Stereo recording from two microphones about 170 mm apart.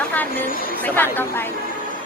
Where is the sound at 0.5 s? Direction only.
60° left (ahead or behind).